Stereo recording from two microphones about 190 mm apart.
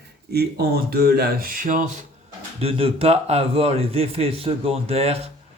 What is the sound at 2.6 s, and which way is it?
A man's voice, 30° right (ahead or behind).